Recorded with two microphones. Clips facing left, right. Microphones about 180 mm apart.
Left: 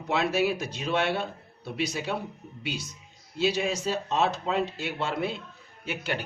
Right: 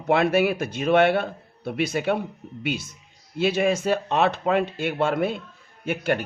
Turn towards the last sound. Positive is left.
turn(degrees=-50)  # may be behind; listen again after turning